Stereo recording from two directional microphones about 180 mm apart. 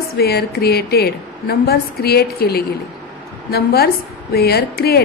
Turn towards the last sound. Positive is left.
turn(degrees=60)  # may be behind; listen again after turning